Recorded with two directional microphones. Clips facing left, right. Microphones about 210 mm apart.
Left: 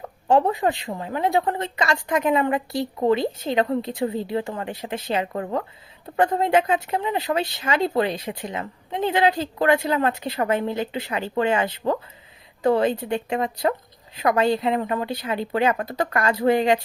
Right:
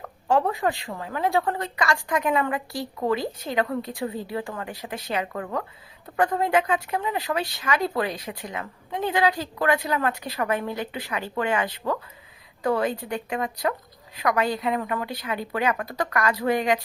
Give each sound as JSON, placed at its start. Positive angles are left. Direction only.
{"t": 0.3, "sound": "speech", "side_deg": 20}